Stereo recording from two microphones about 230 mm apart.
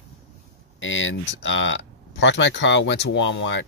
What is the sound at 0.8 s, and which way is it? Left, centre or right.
Speech, left.